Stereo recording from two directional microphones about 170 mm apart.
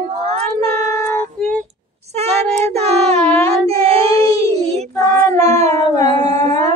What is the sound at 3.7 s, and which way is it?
Child singing, 35° right (ahead or behind).